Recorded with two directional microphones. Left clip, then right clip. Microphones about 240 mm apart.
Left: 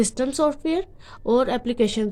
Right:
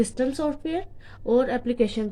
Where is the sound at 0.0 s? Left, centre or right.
Left.